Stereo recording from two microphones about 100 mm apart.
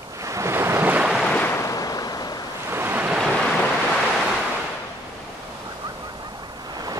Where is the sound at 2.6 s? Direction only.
25° right (ahead or behind).